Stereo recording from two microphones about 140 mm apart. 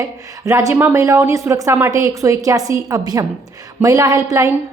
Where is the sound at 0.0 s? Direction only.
20° right (ahead or behind).